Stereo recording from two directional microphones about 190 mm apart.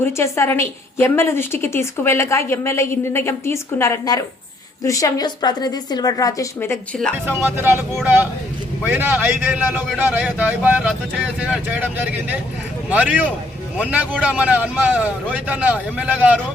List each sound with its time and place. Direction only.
0.0 s a woman's voice: 15° left (ahead or behind)
7.3 s a man's voice: 10° right (ahead or behind)
8.9 s a man's voice: 10° right (ahead or behind)
12.9 s a man's voice: 5° right (ahead or behind)